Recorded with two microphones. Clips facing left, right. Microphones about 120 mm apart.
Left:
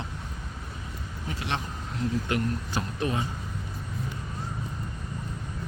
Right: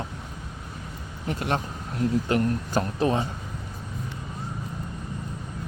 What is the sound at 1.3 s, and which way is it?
Speech, 45° right (ahead or behind).